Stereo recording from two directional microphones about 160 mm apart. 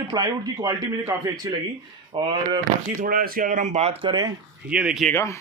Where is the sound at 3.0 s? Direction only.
65° right (ahead or behind); by 3.9 s 45° right (ahead or behind).